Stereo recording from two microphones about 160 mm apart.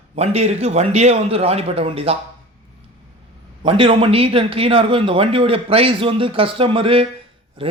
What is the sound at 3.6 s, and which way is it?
Speech, 35° right (ahead or behind).